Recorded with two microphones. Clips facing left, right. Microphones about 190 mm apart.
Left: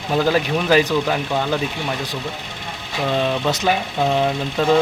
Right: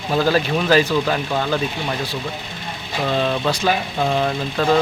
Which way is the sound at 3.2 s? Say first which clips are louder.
Even; 15° left (ahead or behind).